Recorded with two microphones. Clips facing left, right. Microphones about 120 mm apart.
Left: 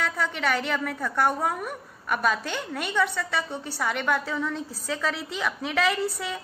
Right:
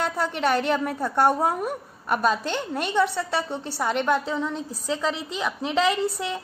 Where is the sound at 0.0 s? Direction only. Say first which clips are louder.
Right 3 dB; 25° right (ahead or behind).